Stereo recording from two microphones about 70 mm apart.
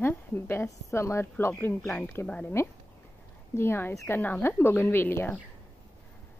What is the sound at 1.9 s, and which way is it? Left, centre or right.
A woman's voice, left.